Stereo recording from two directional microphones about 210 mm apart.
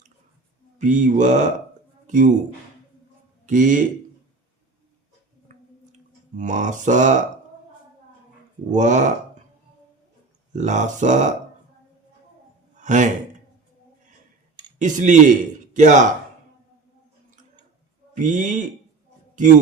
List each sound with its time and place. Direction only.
0.8 s speech: 35° right (ahead or behind)
3.4 s a man's voice: 40° right (ahead or behind)
6.3 s speech: 35° right (ahead or behind)
8.7 s speech: 35° right (ahead or behind)
10.5 s speech: 35° right (ahead or behind)
12.7 s a sound: 35° right (ahead or behind)
14.8 s a man's voice: 35° right (ahead or behind)
18.1 s speech: 35° right (ahead or behind)